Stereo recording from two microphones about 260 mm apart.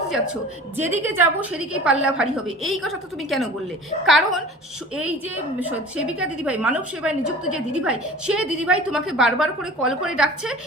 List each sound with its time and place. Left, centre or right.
0.8 s a woman's voice: centre
6.1 s a woman's voice: centre